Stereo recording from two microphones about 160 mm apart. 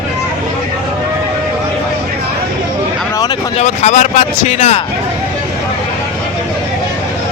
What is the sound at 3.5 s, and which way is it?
Speech, 45° left (ahead or behind).